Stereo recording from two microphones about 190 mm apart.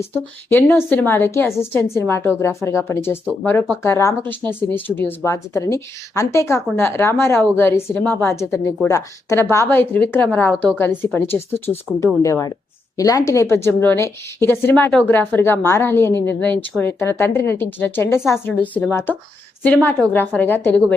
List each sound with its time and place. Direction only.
0.1 s a woman's voice: 10° left (ahead or behind)